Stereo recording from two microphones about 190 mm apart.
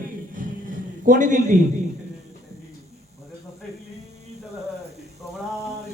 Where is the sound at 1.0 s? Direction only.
40° right (ahead or behind).